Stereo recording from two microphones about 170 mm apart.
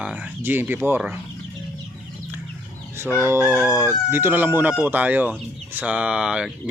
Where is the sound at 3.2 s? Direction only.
15° right (ahead or behind).